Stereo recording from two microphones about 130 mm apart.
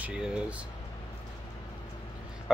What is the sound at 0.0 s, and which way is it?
Speech, 5° right (ahead or behind).